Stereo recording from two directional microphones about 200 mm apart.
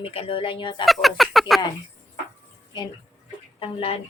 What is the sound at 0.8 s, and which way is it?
Speech, centre (ahead or behind).